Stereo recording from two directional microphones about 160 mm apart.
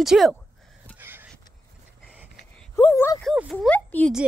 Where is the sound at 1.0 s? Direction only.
10° right (ahead or behind).